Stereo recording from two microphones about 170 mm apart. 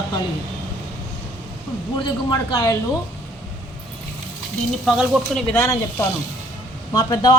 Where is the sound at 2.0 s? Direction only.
25° left (ahead or behind).